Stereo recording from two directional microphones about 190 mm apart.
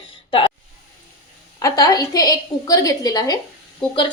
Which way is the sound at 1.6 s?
20° left (ahead or behind).